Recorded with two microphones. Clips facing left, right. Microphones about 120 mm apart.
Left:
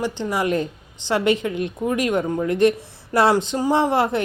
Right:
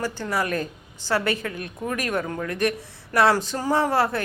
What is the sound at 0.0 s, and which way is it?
A woman's voice, 20° left (ahead or behind).